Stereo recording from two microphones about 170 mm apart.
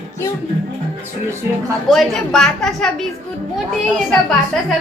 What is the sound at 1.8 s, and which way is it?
A woman's voice, centre (ahead or behind).